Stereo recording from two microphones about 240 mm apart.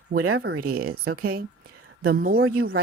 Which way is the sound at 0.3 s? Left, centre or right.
Right.